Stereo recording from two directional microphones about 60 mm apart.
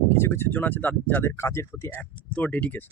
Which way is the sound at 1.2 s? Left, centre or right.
Left.